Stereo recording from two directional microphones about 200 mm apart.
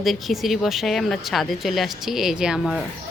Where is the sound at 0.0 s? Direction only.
Centre (ahead or behind).